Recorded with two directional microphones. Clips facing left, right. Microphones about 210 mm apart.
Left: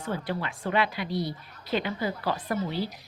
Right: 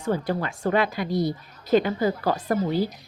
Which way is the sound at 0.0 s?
45° right (ahead or behind).